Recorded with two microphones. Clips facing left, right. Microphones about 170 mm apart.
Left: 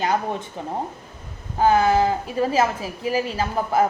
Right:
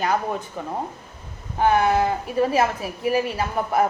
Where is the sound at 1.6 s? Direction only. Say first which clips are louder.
Left 1 dB; 30° left (ahead or behind).